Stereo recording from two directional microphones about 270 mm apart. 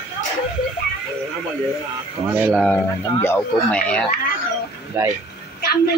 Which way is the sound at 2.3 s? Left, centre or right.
Centre.